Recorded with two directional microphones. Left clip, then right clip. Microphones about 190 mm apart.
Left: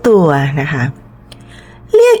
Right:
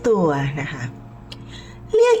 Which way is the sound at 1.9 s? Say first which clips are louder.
Left 7 dB; 40° left (ahead or behind).